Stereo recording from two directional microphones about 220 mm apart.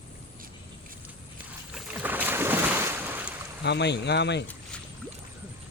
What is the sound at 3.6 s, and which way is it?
Speech, 50° left (ahead or behind).